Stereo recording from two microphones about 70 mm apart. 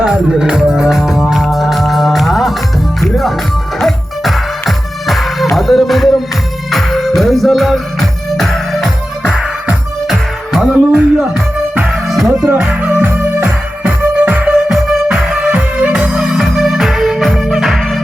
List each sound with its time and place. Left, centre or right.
0.0 s music: centre
12.0 s music: centre
12.9 s music: right
14.5 s music: centre
15.4 s music: centre